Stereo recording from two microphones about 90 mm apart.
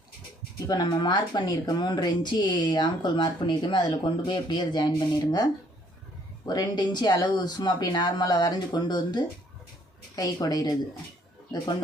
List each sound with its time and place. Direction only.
0.7 s a woman's voice: 50° left (ahead or behind)